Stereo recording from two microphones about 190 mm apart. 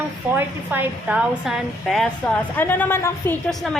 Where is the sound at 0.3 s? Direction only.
10° right (ahead or behind).